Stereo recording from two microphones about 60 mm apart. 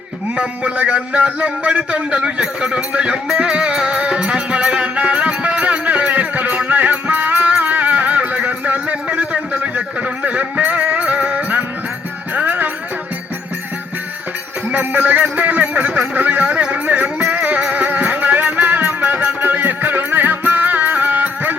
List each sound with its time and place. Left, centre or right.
0.3 s a sound: centre
9.7 s music: right
14.7 s music: right